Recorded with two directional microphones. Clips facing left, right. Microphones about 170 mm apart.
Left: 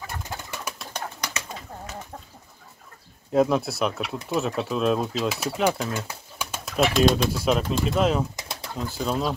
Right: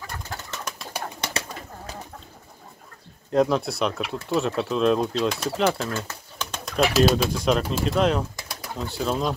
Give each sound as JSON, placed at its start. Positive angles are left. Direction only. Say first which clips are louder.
{"t": 0.0, "sound": "bird", "louder": "left 1 dB", "side_deg": 5}
{"t": 3.3, "sound": "speech", "louder": "even", "side_deg": 5}
{"t": 8.4, "sound": "pigeon", "louder": "left 1 dB", "side_deg": 25}
{"t": 8.7, "sound": "speech", "louder": "right 1 dB", "side_deg": 0}